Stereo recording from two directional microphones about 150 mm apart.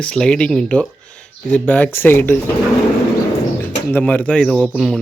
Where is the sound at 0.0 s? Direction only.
5° left (ahead or behind).